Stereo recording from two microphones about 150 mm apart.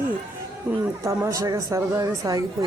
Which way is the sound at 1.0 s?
20° right (ahead or behind).